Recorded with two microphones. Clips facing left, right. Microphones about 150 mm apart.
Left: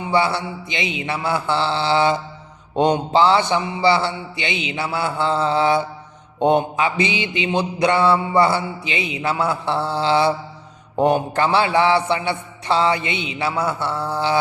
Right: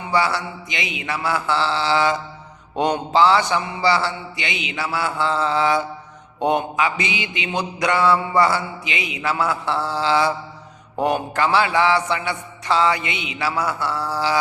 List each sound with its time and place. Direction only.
0.1 s mantra: 25° left (ahead or behind)